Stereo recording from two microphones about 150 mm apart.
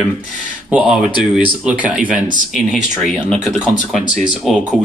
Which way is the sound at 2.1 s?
60° right (ahead or behind).